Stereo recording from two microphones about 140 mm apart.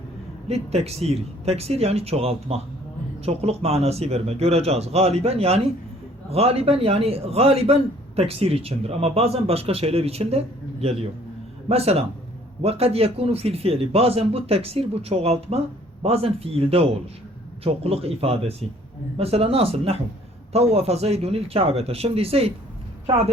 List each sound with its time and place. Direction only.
0.4 s a man's voice: 50° right (ahead or behind)